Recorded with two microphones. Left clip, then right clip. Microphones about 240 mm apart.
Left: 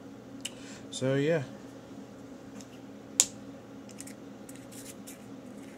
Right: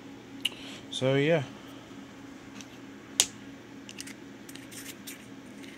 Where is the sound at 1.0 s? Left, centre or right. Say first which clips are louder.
Right 3 dB; right.